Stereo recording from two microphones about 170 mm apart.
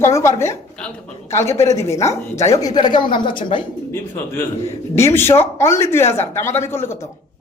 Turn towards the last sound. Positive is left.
turn(degrees=15)  # may be behind; listen again after turning